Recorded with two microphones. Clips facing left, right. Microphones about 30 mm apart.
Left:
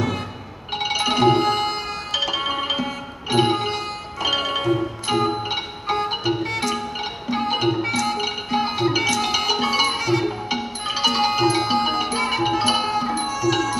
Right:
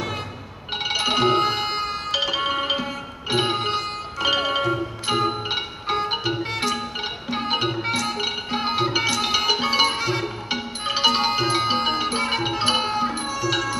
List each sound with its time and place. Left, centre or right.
0.7 s music: centre
2.2 s music: centre
8.0 s music: centre
13.3 s tabla: centre